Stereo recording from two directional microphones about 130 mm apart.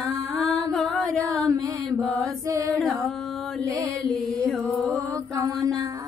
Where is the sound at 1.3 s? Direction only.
25° right (ahead or behind).